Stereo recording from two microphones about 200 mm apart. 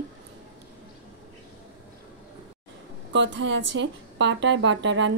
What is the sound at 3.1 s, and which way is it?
A woman's voice, 65° right (ahead or behind).